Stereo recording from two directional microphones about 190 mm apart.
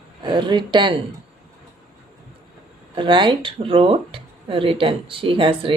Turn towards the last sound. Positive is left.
turn(degrees=-30)  # may be behind; listen again after turning